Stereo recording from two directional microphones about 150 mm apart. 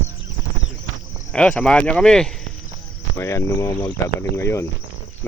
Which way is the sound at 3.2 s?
15° left (ahead or behind).